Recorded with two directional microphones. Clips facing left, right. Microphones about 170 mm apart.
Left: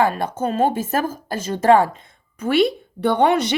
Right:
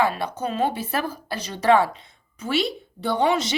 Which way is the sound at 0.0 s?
50° left (ahead or behind).